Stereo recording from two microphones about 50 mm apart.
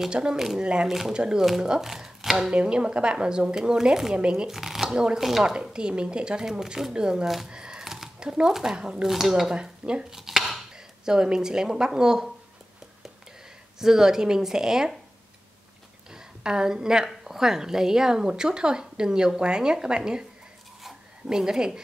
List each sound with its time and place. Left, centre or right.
0.1 s a woman's voice: centre
0.8 s a woman's voice: centre
2.5 s a woman's voice: centre
4.5 s a woman's voice: centre
7.4 s a sound: centre
7.8 s a sound: centre
8.2 s a woman's voice: centre
10.1 s dishes: centre
11.1 s a woman's voice: centre
13.7 s a woman's voice: centre
16.1 s a woman's voice: centre
21.3 s a woman's voice: centre